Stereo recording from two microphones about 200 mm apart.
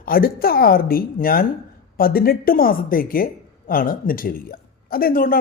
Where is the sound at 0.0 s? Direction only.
45° left (ahead or behind).